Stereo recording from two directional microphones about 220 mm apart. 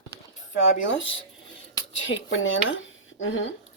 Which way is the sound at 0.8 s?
60° left (ahead or behind).